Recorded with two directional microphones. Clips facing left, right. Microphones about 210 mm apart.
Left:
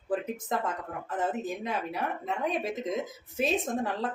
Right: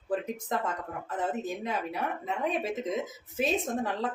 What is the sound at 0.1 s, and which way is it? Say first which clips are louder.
Speech: even; centre (ahead or behind).